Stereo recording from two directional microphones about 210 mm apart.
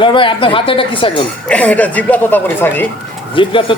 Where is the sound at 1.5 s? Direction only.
5° left (ahead or behind).